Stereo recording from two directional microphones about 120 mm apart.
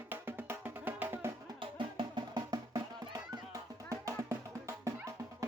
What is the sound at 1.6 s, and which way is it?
Music, 40° right (ahead or behind).